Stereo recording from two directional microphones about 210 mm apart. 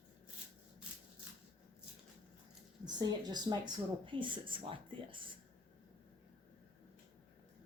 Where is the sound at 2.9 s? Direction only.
20° right (ahead or behind).